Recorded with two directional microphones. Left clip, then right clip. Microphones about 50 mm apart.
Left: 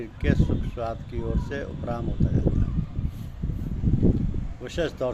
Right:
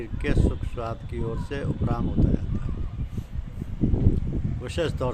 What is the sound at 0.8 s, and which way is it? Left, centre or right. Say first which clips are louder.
Speech: right 2 dB; right.